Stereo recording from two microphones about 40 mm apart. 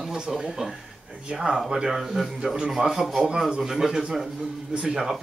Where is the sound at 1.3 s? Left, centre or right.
Right.